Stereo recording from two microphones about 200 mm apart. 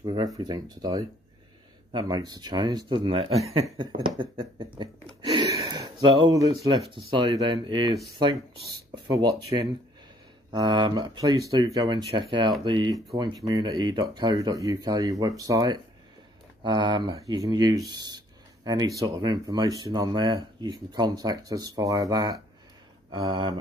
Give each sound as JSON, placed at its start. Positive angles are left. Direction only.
{"t": 0.0, "sound": "speech", "side_deg": -20}
{"t": 5.3, "sound": "a sound", "side_deg": -20}
{"t": 6.1, "sound": "speech", "side_deg": -20}
{"t": 8.9, "sound": "speech", "side_deg": -20}